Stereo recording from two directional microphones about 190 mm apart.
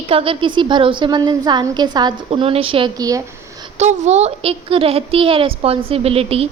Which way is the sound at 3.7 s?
35° right (ahead or behind).